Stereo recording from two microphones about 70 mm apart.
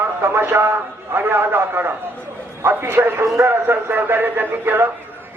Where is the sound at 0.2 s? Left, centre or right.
Right.